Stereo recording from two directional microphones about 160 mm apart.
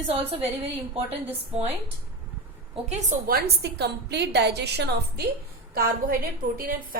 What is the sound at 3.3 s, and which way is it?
A woman's voice, 80° right.